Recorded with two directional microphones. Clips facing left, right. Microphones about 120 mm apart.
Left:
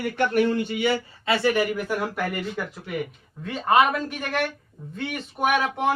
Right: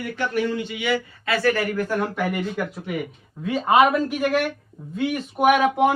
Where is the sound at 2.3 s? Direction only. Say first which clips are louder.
Right 4 dB; centre (ahead or behind).